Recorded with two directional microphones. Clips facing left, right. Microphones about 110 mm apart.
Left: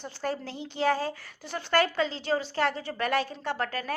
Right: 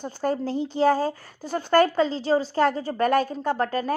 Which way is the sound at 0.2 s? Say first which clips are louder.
Right 8 dB; 40° right (ahead or behind).